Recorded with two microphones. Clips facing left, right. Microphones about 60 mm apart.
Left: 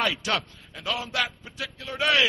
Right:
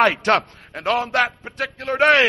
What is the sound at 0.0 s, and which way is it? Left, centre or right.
A man's voice, right.